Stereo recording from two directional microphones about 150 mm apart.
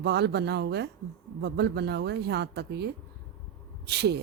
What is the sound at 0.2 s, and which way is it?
Speech, 90° right.